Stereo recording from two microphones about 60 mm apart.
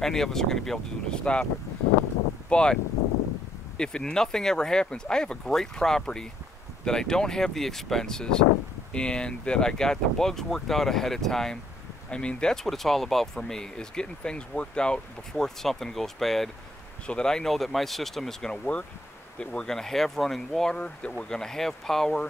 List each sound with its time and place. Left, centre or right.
0.0 s speech: centre
2.5 s speech: centre
17.0 s speech: centre